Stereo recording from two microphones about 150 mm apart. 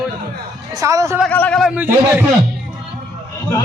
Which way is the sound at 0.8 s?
20° right (ahead or behind).